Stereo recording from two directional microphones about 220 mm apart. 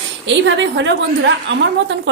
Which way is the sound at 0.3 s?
55° right (ahead or behind).